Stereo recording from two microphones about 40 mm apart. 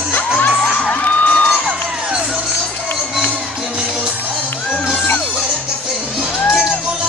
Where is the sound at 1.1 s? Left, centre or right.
Left.